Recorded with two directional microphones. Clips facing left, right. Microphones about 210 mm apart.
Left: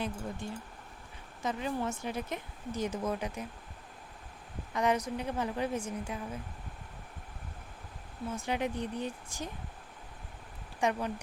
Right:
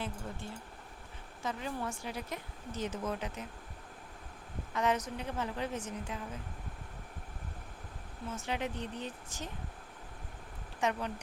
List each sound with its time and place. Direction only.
0.0 s speech: 15° left (ahead or behind)
4.7 s speech: 15° left (ahead or behind)
8.3 s speech: 15° left (ahead or behind)
10.8 s speech: 15° left (ahead or behind)